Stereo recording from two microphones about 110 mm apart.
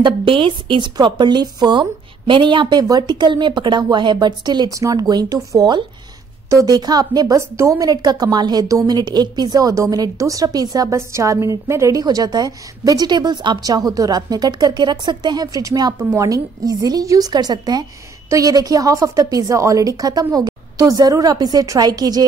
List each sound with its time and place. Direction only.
0.0 s a woman's voice: 50° right (ahead or behind)
7.3 s a woman's voice: 25° right (ahead or behind)